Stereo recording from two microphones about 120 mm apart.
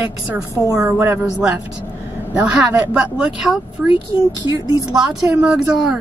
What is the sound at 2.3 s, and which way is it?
Speech, 10° right (ahead or behind).